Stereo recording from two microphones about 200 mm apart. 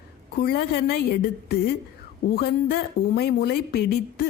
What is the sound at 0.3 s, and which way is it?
A woman's voice, 50° left (ahead or behind).